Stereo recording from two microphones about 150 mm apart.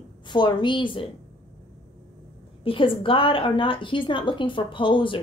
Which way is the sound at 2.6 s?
35° left (ahead or behind).